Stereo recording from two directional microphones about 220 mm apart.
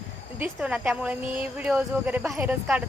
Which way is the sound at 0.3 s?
5° right (ahead or behind).